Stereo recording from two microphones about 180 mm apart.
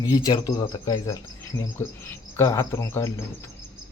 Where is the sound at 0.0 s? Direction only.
20° left (ahead or behind).